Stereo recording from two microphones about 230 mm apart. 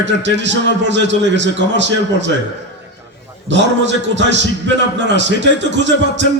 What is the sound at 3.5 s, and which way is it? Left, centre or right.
A man's voice, right.